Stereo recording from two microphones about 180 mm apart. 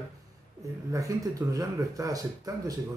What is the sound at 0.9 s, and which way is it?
Speech, 20° right (ahead or behind).